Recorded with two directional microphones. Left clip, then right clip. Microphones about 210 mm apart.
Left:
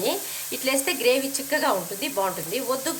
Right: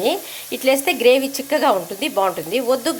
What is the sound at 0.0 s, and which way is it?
Speech, 40° right (ahead or behind).